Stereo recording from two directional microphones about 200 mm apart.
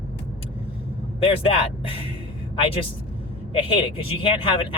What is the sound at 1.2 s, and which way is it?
Speech, 30° left (ahead or behind).